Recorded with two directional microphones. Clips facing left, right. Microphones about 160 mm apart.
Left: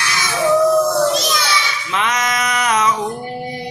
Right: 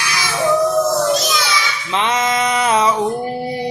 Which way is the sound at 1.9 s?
30° right (ahead or behind).